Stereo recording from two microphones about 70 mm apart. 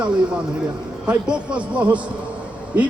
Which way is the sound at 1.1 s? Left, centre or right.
Centre.